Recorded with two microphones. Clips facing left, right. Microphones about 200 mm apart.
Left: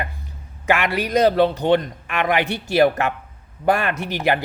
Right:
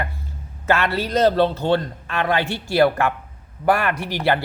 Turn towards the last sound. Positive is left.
turn(degrees=15)  # may be behind; listen again after turning